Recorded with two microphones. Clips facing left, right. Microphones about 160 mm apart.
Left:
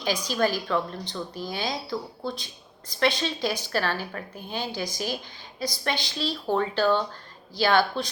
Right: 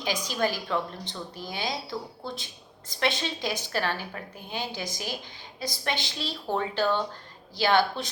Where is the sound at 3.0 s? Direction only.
20° right (ahead or behind).